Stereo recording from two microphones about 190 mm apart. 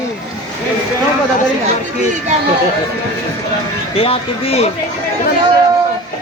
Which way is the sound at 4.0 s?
30° left (ahead or behind).